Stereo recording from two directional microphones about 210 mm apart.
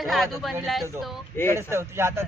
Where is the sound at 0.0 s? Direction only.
Centre (ahead or behind).